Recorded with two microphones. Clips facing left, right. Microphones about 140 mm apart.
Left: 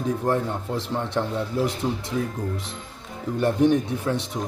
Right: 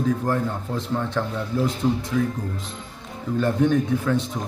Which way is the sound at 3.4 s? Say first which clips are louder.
Left 1 dB; 25° left (ahead or behind).